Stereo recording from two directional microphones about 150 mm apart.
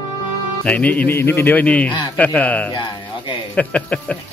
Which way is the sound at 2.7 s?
30° left (ahead or behind).